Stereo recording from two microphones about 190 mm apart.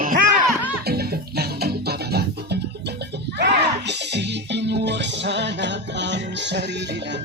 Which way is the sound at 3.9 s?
65° right (ahead or behind).